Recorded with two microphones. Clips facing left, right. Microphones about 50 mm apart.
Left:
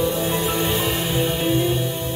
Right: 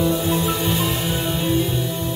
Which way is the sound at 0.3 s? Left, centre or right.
Left.